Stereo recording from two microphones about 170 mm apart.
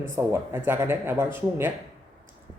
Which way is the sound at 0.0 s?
15° right (ahead or behind).